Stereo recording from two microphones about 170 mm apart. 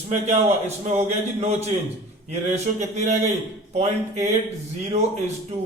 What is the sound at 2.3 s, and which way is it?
Speech, 45° right (ahead or behind).